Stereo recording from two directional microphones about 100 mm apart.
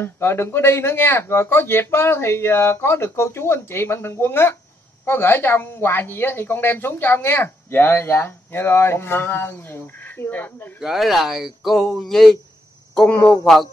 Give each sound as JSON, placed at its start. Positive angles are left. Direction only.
{"t": 0.0, "sound": "a woman's voice", "side_deg": 25}
{"t": 10.8, "sound": "speech", "side_deg": 0}